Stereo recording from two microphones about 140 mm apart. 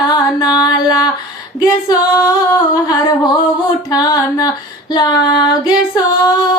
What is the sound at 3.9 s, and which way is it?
Speech, 25° left (ahead or behind).